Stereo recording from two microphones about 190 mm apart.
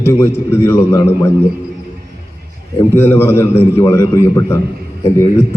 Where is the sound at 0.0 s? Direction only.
15° left (ahead or behind).